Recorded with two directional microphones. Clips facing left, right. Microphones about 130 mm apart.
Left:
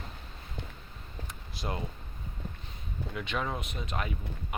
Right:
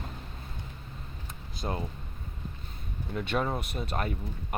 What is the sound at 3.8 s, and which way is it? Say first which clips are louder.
Speech: right 3 dB; 45° right (ahead or behind).